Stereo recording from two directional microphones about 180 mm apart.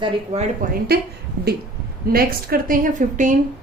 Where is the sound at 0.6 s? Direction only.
45° right (ahead or behind).